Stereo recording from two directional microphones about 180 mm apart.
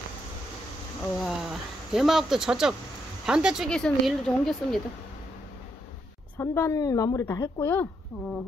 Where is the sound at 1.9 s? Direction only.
Centre (ahead or behind).